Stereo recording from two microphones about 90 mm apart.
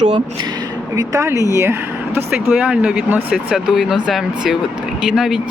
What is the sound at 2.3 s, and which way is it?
Speech, 15° right (ahead or behind).